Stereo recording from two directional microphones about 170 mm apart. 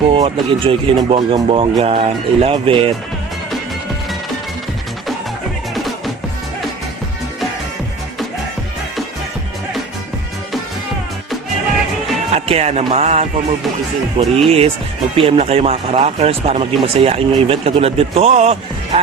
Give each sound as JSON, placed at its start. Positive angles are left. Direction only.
{"t": 0.1, "sound": "speech", "side_deg": -30}
{"t": 12.3, "sound": "music", "side_deg": -40}
{"t": 14.2, "sound": "speech", "side_deg": -35}